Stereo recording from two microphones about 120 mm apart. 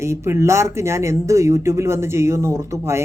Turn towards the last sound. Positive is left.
turn(degrees=-25)  # may be behind; listen again after turning